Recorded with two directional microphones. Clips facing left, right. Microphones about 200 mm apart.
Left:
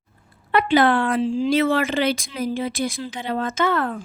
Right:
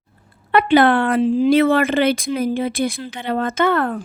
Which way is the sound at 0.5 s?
60° right (ahead or behind).